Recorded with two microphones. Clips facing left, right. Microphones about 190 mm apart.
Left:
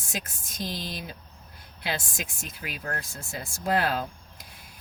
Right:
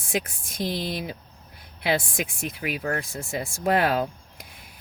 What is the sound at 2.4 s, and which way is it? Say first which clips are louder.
Speech: right 9 dB; 65° right (ahead or behind).